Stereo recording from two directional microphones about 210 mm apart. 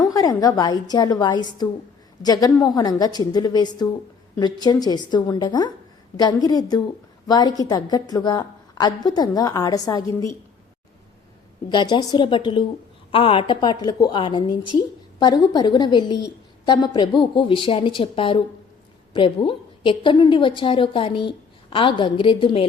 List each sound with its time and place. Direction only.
0.0 s a woman's voice: 15° left (ahead or behind)
11.7 s a woman's voice: 20° left (ahead or behind)